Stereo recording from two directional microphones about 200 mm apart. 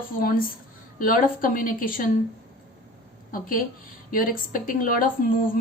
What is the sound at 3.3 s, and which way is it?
Speech, 45° left (ahead or behind).